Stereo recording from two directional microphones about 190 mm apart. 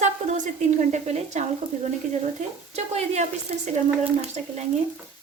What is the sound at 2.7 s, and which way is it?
Speech, 35° right (ahead or behind).